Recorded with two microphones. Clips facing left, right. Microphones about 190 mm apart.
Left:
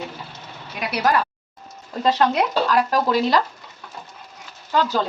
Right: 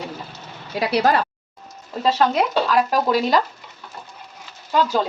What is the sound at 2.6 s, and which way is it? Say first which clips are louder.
Speech: right 1 dB; 10° right (ahead or behind).